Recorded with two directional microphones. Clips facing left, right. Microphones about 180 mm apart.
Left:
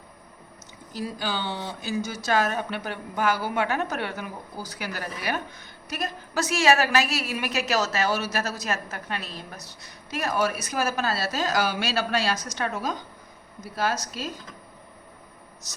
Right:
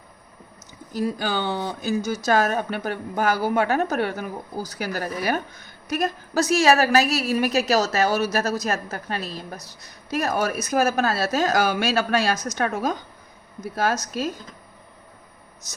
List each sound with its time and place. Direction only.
0.9 s a woman's voice: 50° right (ahead or behind)